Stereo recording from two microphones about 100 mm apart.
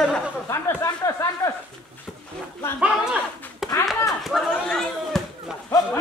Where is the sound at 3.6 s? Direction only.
Centre (ahead or behind).